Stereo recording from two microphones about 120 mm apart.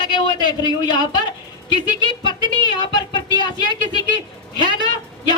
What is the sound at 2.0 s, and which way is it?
Speech, 40° right (ahead or behind).